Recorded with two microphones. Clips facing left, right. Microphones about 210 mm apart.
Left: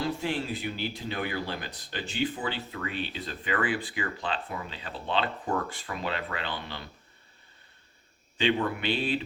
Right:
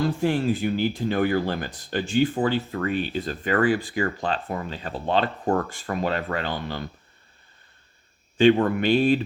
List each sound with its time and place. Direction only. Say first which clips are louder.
0.0 s speech: right 8 dB; 50° right (ahead or behind)
8.4 s speech: right 10 dB; 45° right (ahead or behind)